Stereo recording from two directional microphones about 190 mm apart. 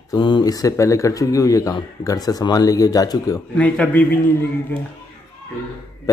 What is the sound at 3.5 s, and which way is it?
A man's voice, 5° left (ahead or behind).